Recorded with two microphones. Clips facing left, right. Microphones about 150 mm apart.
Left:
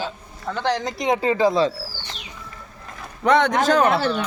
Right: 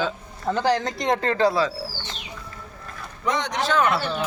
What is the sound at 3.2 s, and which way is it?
Speech, 60° left (ahead or behind).